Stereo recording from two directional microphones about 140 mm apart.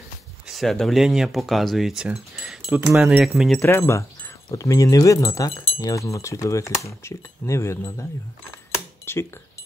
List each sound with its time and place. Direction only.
0.5 s speech: centre (ahead or behind)
2.8 s speech: 15° right (ahead or behind)
3.1 s speech: 5° right (ahead or behind)
3.6 s speech: 20° left (ahead or behind)
9.0 s a sound: 15° left (ahead or behind)